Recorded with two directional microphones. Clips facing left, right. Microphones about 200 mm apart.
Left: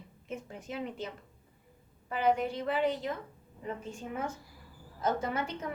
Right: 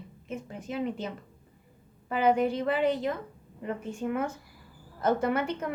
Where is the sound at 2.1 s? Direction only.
65° right (ahead or behind).